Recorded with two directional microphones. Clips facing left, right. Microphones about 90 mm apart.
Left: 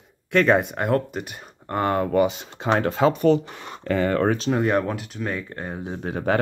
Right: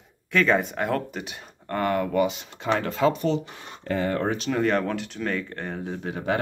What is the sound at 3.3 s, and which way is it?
Speech, 55° left (ahead or behind).